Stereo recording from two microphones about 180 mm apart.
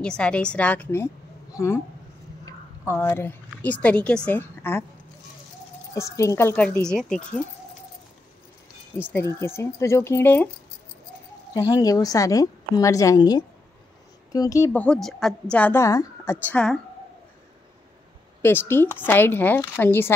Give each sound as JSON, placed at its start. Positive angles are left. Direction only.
{"t": 0.0, "sound": "a woman's voice", "side_deg": 5}
{"t": 2.9, "sound": "a woman's voice", "side_deg": 15}
{"t": 5.9, "sound": "a woman's voice", "side_deg": 15}
{"t": 9.1, "sound": "a woman's voice", "side_deg": 15}
{"t": 11.5, "sound": "a woman's voice", "side_deg": 20}
{"t": 18.4, "sound": "a woman's voice", "side_deg": 10}